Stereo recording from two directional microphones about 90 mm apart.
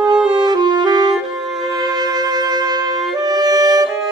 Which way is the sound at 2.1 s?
45° right (ahead or behind).